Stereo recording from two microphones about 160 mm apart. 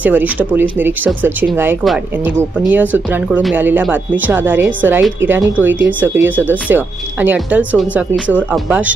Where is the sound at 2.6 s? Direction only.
10° right (ahead or behind).